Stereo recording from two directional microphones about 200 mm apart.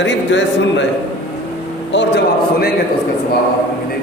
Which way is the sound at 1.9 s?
60° left (ahead or behind).